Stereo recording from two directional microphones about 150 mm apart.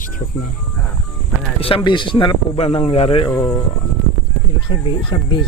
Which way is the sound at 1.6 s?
35° left (ahead or behind).